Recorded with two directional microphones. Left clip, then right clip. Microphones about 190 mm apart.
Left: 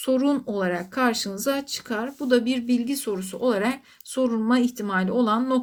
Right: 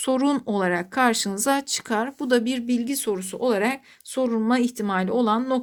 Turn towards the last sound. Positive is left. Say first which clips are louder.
# right 1 dB
turn(degrees=-30)  # may be behind; listen again after turning